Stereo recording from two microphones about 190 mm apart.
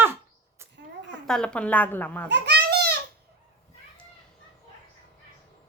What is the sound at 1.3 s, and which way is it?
Speech, 5° left (ahead or behind).